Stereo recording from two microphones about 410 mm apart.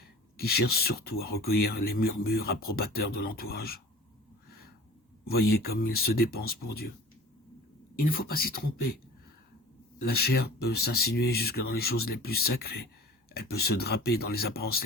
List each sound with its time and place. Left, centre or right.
0.3 s speech: left
4.4 s a sound: left
5.3 s speech: left
7.9 s speech: left
10.0 s speech: left